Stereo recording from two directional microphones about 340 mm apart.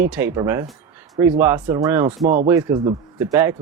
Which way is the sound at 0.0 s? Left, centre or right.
Centre.